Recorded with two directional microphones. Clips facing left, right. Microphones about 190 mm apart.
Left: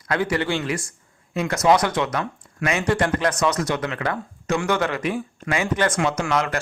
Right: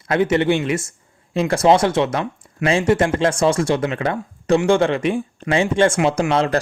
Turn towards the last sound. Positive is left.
turn(degrees=-30)  # may be behind; listen again after turning